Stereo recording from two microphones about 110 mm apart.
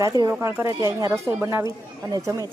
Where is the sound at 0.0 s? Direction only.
30° right (ahead or behind).